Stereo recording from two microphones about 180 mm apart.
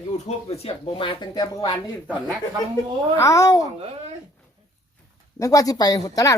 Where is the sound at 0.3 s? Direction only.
35° left (ahead or behind).